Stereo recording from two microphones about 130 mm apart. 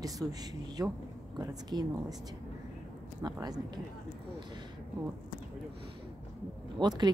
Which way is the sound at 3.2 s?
30° right (ahead or behind).